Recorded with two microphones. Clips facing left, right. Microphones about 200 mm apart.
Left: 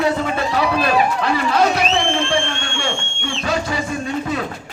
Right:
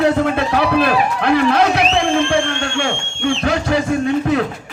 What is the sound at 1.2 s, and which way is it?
Run, 60° right (ahead or behind).